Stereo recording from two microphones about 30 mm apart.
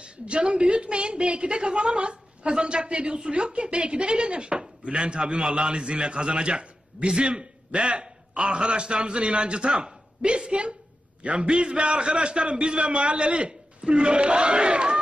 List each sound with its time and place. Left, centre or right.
0.0 s a woman's voice: right
8.4 s a woman's voice: right